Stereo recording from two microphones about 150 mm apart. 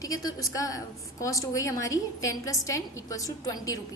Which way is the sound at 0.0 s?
25° left (ahead or behind).